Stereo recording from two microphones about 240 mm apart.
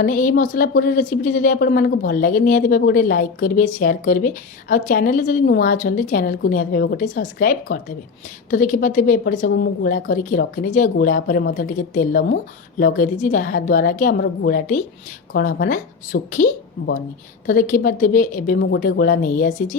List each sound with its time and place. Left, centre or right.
0.0 s a woman's voice: left